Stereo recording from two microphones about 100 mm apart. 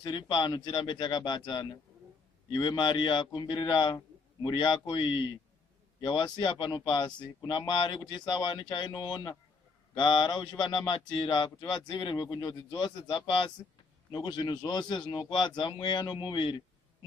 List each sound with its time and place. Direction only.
0.0 s speech: 50° left (ahead or behind)